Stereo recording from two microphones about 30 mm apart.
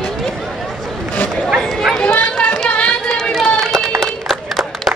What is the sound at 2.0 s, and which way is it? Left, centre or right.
Run, left.